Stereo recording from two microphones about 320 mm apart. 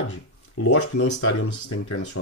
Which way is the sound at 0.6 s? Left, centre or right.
Left.